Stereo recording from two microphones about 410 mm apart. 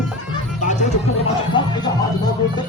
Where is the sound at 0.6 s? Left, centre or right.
Centre.